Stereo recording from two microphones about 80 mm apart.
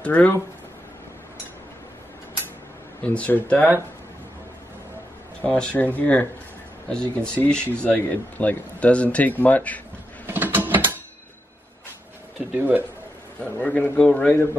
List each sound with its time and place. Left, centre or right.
0.0 s a man's voice: centre
3.0 s speech: centre
5.4 s speech: centre
10.2 s a sound: right
12.5 s speech: right
13.4 s a man's voice: centre